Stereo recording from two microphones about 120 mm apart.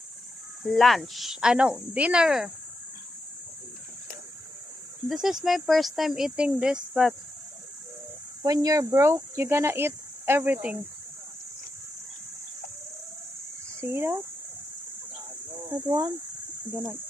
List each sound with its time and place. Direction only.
0.6 s speech: centre (ahead or behind)
5.0 s speech: 5° right (ahead or behind)
8.4 s speech: 30° right (ahead or behind); by 10.8 s 15° right (ahead or behind)
13.8 s speech: 20° right (ahead or behind)
15.7 s speech: 35° right (ahead or behind)